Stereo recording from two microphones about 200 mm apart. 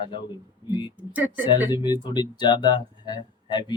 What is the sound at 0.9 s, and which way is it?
Speech, 10° right (ahead or behind).